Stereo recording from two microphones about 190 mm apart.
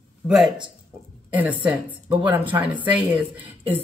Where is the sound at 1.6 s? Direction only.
10° right (ahead or behind).